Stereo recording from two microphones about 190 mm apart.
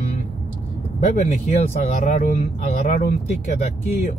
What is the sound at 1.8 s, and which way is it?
Speech, 40° left (ahead or behind).